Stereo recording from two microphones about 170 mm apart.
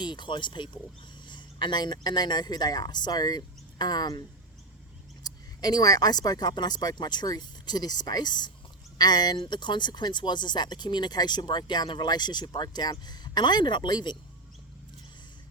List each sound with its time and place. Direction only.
0.0 s speech: 25° left (ahead or behind)
5.2 s speech: 25° left (ahead or behind)